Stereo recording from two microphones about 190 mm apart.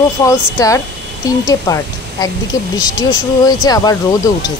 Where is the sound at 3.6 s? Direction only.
20° left (ahead or behind).